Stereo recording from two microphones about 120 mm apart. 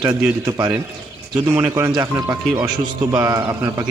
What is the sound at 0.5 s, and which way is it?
Speech, 35° right (ahead or behind).